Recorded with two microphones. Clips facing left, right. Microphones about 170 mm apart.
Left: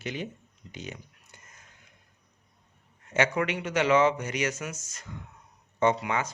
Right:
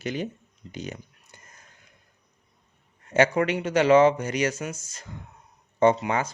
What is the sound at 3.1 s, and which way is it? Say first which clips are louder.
Speech: right 5 dB; 35° right (ahead or behind).